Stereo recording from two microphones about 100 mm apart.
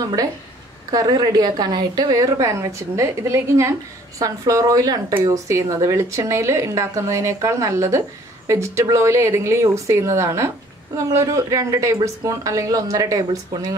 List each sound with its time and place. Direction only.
0.0 s a woman's voice: 35° right (ahead or behind)